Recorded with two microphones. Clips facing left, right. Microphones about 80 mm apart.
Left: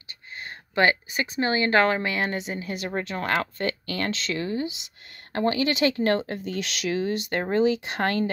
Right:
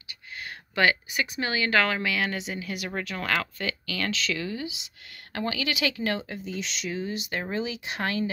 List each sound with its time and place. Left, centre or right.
0.4 s a sound: left
1.1 s a woman's voice: left
7.2 s speech: left